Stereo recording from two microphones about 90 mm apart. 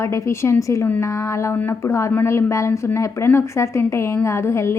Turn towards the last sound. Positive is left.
turn(degrees=30)  # may be behind; listen again after turning